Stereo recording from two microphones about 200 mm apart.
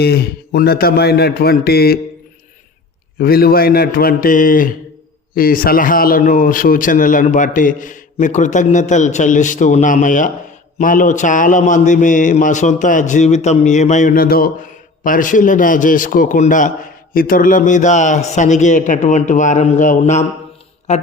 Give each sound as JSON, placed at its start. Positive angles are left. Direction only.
{"t": 0.0, "sound": "speech", "side_deg": 50}
{"t": 3.2, "sound": "speech", "side_deg": 50}